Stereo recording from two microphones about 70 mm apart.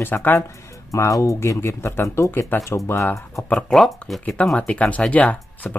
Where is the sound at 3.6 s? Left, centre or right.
Centre.